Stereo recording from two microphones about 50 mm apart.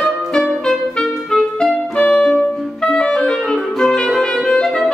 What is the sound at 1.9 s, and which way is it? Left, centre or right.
Music, left.